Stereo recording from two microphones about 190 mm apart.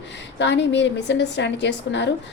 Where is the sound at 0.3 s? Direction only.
65° left (ahead or behind).